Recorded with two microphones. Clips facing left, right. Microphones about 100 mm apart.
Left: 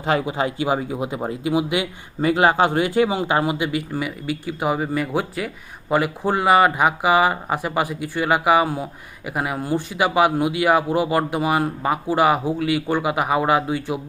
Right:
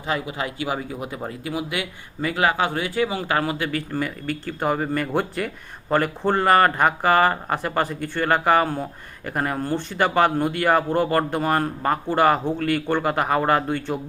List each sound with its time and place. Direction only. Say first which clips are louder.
0.3 s speech: left 5 dB; 25° left (ahead or behind); by 14.0 s 5° left (ahead or behind)